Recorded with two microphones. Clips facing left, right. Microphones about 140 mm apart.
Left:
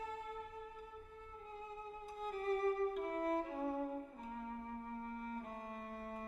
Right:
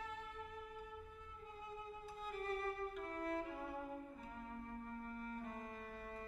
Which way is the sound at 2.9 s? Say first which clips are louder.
Left 6 dB; 35° left (ahead or behind).